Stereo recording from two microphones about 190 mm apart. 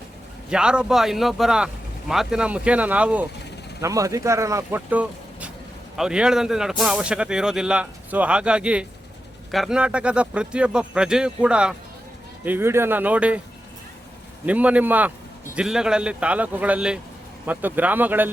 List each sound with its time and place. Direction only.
0.5 s speech: 5° right (ahead or behind)
14.4 s speech: 5° right (ahead or behind)